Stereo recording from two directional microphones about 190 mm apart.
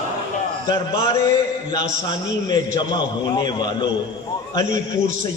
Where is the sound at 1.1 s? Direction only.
15° left (ahead or behind).